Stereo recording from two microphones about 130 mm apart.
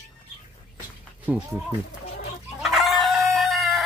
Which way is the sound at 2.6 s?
Centre (ahead or behind).